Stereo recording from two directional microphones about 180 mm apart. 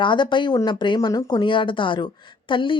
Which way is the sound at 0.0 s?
25° left (ahead or behind).